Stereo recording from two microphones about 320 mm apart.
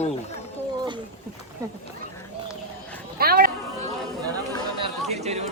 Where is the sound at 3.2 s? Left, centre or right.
Right.